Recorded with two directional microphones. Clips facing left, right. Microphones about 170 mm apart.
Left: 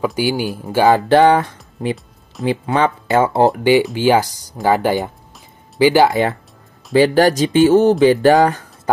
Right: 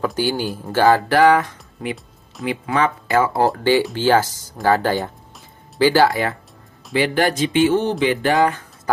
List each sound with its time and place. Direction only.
0.0 s speech: 10° left (ahead or behind)
6.9 s speech: 40° left (ahead or behind)